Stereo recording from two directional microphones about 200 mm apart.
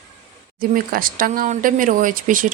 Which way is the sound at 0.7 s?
45° right (ahead or behind).